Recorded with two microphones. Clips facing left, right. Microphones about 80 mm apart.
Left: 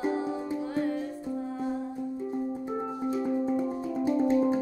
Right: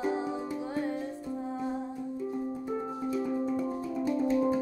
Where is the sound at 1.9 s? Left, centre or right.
Left.